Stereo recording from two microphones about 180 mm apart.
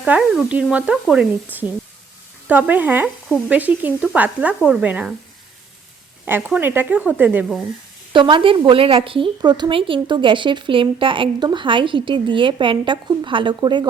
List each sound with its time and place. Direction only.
0.0 s speech: 5° right (ahead or behind)
6.2 s speech: 10° right (ahead or behind)
8.1 s a woman's voice: 25° right (ahead or behind)